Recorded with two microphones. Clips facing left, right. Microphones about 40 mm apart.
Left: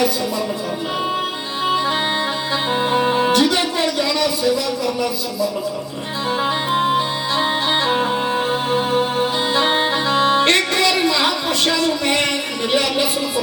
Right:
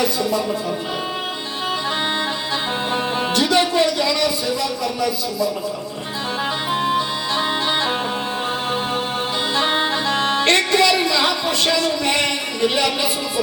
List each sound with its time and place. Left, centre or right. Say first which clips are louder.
2.9 s music: left 5 dB; centre
6.7 s music: left 1 dB; centre
9.6 s accordion: left 1 dB; centre
10.5 s a sound: right 1 dB; centre
11.8 s speech: left 1 dB; centre
12.7 s music: left 2 dB; centre